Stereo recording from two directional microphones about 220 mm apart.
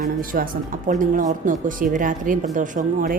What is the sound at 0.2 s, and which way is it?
Speech, 40° right (ahead or behind).